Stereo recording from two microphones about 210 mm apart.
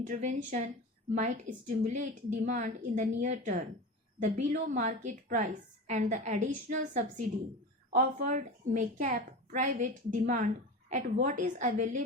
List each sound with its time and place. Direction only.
0.0 s a woman's voice: 35° right (ahead or behind)